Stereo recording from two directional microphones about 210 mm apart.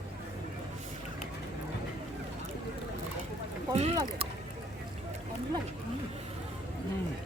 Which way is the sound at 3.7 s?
30° right (ahead or behind).